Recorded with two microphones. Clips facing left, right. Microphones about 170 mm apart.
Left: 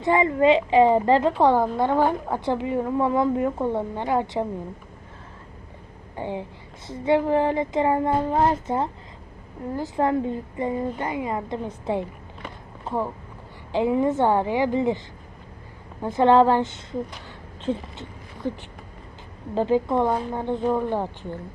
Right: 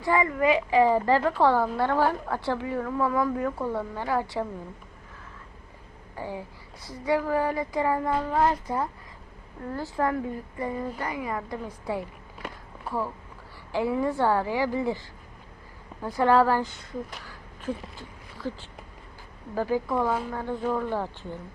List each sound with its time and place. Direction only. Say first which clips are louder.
0.0 s a woman's voice: left 5 dB; 20° left (ahead or behind)
6.1 s a woman's voice: left 5 dB; 20° left (ahead or behind)
17.2 s a sound: left 6 dB; 25° left (ahead or behind)
19.5 s a woman's voice: left 5 dB; 20° left (ahead or behind)